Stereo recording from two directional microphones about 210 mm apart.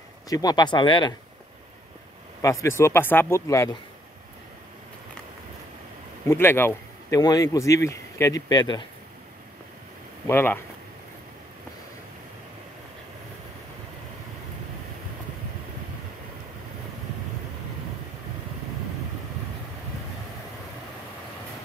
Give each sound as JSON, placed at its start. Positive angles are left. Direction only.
{"t": 0.3, "sound": "speech", "side_deg": 20}
{"t": 2.4, "sound": "speech", "side_deg": 15}
{"t": 6.2, "sound": "speech", "side_deg": 10}
{"t": 10.2, "sound": "speech", "side_deg": 10}